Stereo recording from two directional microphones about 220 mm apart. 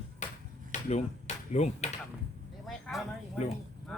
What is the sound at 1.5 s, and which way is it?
Speech, 30° left (ahead or behind).